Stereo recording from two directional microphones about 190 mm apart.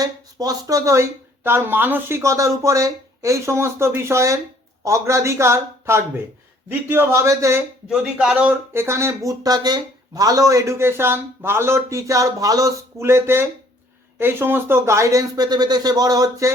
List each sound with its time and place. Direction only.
0.0 s speech: 20° right (ahead or behind)
7.9 s speech: 5° right (ahead or behind)